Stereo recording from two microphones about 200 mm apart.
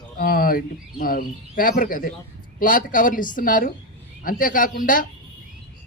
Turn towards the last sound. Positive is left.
turn(degrees=45)  # may be behind; listen again after turning